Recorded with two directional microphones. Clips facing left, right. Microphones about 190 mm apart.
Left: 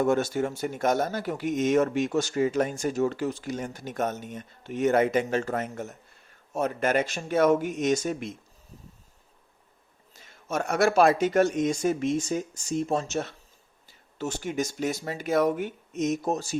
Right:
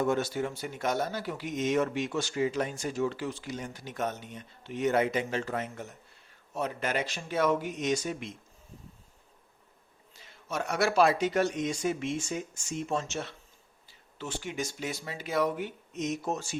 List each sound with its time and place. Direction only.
0.0 s speech: 50° left (ahead or behind)
10.2 s speech: 45° left (ahead or behind)